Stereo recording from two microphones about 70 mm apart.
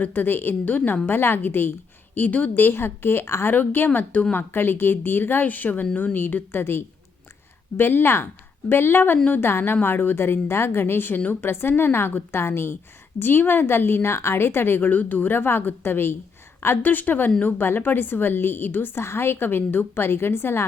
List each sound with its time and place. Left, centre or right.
0.0 s speech: left
1.0 s a woman's voice: left